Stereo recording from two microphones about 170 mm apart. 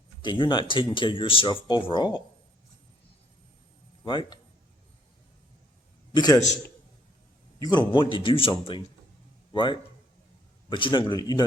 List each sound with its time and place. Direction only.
0.2 s speech: 25° left (ahead or behind)
4.0 s speech: 30° left (ahead or behind)
6.1 s speech: 20° left (ahead or behind)
7.6 s a man's voice: 25° left (ahead or behind)